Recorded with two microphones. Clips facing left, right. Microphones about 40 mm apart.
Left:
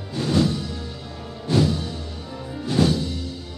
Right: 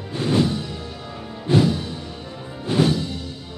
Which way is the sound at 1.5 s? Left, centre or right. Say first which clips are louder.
Right 2 dB; right.